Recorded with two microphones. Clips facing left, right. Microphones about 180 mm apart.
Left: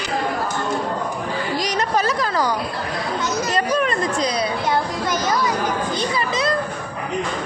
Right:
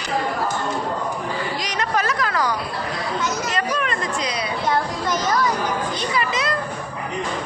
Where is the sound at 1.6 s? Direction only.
35° left (ahead or behind).